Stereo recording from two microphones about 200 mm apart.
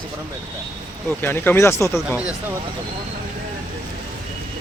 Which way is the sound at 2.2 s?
5° right (ahead or behind).